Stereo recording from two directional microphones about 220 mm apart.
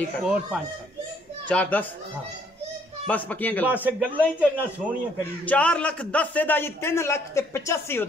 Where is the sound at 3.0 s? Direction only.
5° left (ahead or behind).